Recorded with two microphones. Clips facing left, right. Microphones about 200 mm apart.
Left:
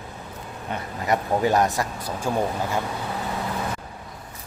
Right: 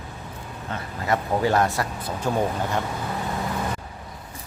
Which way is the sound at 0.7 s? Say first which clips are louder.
Left 1 dB; 15° left (ahead or behind).